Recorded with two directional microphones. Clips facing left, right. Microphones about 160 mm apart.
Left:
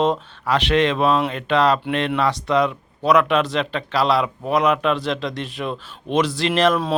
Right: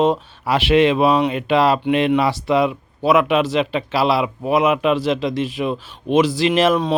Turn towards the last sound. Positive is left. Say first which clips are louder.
# right 2 dB
turn(degrees=-5)  # may be behind; listen again after turning